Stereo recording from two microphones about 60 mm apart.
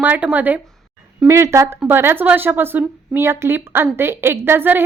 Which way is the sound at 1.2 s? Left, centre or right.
Right.